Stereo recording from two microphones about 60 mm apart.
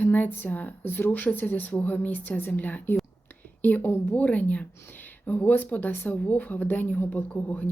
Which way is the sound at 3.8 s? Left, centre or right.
Left.